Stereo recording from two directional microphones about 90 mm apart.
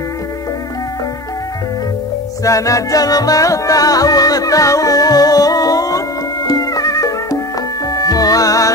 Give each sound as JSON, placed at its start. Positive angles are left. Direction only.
{"t": 2.4, "sound": "music", "side_deg": 40}